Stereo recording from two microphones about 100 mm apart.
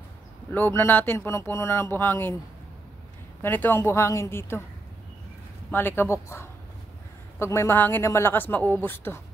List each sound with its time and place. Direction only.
0.5 s speech: 25° left (ahead or behind)
3.4 s speech: 20° left (ahead or behind)
5.7 s speech: 20° left (ahead or behind)